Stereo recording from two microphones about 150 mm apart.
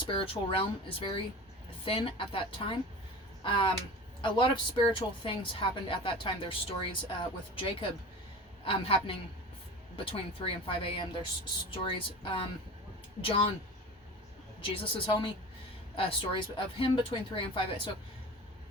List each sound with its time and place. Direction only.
0.0 s a woman's voice: 35° left (ahead or behind)
14.6 s a woman's voice: 35° left (ahead or behind)